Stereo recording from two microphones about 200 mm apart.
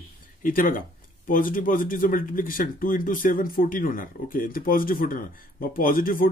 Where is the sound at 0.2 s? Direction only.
45° left (ahead or behind).